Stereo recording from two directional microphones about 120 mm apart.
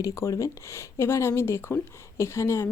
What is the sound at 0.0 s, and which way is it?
A woman's voice, 25° left (ahead or behind).